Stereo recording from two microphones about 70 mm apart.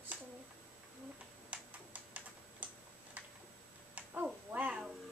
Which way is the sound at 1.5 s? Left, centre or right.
Right.